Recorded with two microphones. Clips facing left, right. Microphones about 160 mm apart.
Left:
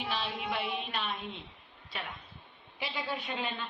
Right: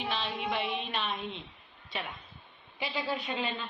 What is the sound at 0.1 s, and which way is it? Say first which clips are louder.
Music: right 1 dB; 5° left (ahead or behind).